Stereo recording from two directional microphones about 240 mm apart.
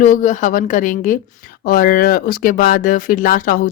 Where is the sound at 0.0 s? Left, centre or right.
Left.